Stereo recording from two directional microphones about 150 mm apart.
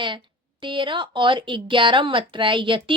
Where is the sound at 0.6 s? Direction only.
35° right (ahead or behind).